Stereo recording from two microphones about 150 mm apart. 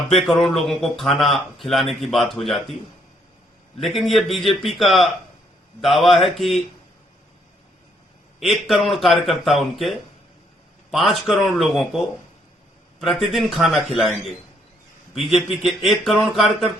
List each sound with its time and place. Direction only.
0.1 s speech: centre (ahead or behind)
3.8 s speech: centre (ahead or behind)
8.4 s speech: centre (ahead or behind)
10.9 s speech: centre (ahead or behind)